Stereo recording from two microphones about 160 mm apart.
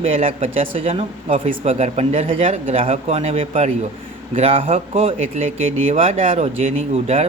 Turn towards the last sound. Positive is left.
turn(degrees=-40)  # may be behind; listen again after turning